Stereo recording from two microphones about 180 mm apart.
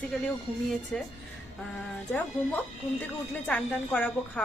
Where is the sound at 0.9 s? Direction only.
Centre (ahead or behind).